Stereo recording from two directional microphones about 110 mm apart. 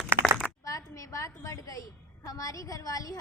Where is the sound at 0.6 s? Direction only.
30° left (ahead or behind).